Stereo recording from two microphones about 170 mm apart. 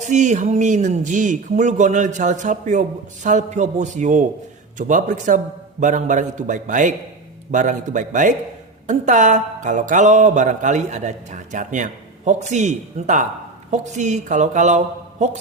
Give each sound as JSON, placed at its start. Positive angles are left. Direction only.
{"t": 0.0, "sound": "speech", "side_deg": -45}